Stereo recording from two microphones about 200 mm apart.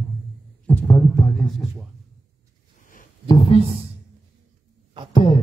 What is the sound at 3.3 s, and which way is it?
Speech, 30° left (ahead or behind).